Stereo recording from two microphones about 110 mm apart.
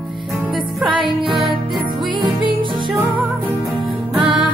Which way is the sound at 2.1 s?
45° right (ahead or behind).